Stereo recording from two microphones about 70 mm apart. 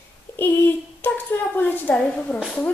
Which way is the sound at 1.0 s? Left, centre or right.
Left.